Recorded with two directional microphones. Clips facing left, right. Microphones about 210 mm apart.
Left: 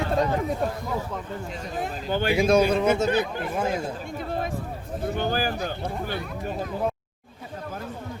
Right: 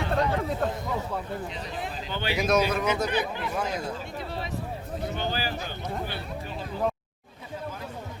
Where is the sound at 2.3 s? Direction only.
30° left (ahead or behind).